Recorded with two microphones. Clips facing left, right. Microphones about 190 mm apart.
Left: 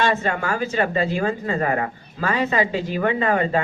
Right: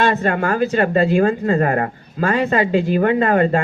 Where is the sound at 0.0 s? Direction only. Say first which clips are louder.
Right 4 dB; 55° right (ahead or behind).